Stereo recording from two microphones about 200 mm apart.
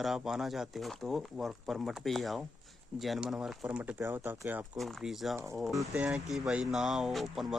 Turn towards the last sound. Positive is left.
turn(degrees=0)  # may be behind; listen again after turning